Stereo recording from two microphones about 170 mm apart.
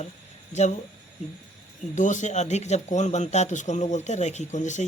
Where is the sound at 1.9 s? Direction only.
45° left (ahead or behind).